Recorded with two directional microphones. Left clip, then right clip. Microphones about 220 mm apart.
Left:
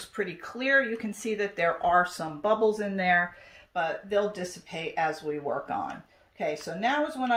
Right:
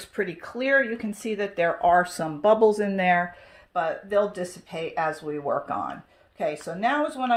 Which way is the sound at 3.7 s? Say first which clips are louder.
Right 3 dB; 30° right (ahead or behind).